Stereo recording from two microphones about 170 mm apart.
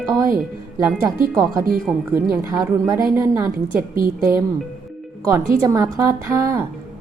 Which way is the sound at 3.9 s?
55° right (ahead or behind).